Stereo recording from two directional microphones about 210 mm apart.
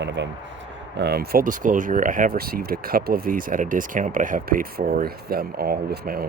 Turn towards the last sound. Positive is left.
turn(degrees=-45)  # may be behind; listen again after turning